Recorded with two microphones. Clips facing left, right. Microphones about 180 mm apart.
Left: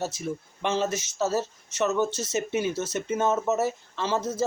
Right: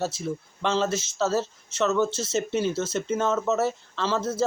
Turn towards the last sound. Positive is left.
turn(degrees=15)  # may be behind; listen again after turning